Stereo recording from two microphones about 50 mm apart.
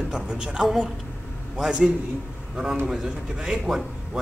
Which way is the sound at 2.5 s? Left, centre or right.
Centre.